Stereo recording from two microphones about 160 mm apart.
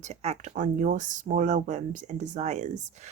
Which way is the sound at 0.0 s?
45° right (ahead or behind).